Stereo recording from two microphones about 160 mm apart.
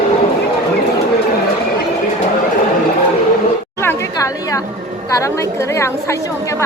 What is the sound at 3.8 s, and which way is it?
Chatter, 20° left (ahead or behind).